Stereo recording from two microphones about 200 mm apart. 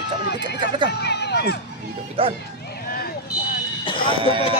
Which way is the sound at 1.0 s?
55° left (ahead or behind).